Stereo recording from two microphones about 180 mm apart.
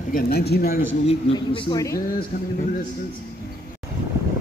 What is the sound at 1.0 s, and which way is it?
Speech, 30° left (ahead or behind).